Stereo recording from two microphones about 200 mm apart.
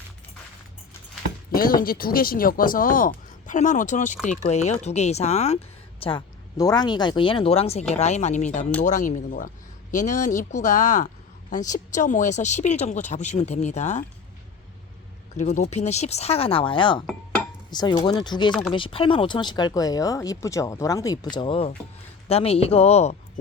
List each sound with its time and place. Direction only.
1.5 s speech: 45° left (ahead or behind)
15.4 s speech: 35° left (ahead or behind)